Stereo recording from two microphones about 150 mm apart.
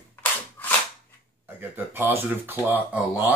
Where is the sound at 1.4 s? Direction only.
15° right (ahead or behind).